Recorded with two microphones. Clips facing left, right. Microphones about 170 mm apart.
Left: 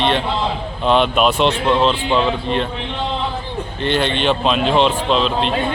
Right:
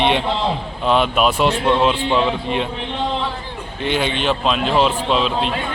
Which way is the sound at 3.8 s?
10° right (ahead or behind).